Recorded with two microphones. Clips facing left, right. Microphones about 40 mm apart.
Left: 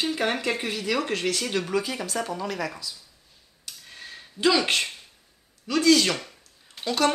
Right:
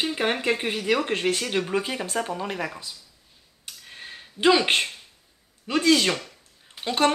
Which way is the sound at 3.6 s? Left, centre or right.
Right.